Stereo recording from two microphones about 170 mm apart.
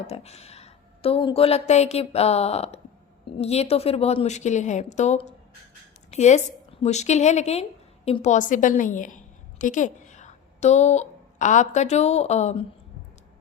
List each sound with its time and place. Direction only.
0.1 s a woman's voice: 35° left (ahead or behind)